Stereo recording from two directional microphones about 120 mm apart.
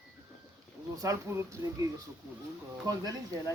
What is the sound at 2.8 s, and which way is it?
Speech, 30° right (ahead or behind).